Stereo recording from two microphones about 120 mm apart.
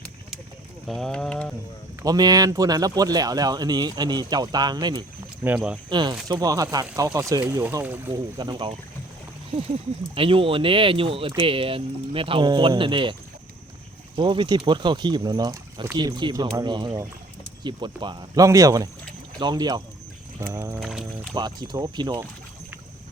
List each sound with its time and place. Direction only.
0.9 s speech: 5° left (ahead or behind)
2.0 s speech: 30° right (ahead or behind)
5.4 s speech: 10° right (ahead or behind)
5.9 s speech: 40° right (ahead or behind)
7.7 s speech: 20° right (ahead or behind)
8.4 s speech: 40° right (ahead or behind)
10.2 s speech: 50° right (ahead or behind)
14.2 s speech: 40° right (ahead or behind)
20.4 s speech: 25° right (ahead or behind)
20.7 s speech: 5° right (ahead or behind)
21.3 s speech: 35° right (ahead or behind)